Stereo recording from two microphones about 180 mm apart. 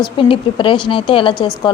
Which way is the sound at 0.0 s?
30° left (ahead or behind).